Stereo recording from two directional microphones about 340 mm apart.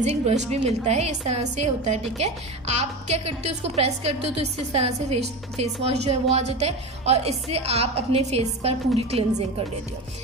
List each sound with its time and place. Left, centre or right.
0.0 s a woman's voice: centre